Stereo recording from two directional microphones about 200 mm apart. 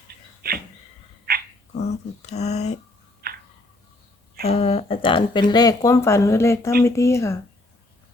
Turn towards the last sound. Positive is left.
turn(degrees=15)  # may be behind; listen again after turning